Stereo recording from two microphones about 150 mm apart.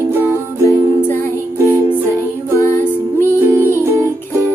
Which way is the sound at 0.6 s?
15° left (ahead or behind).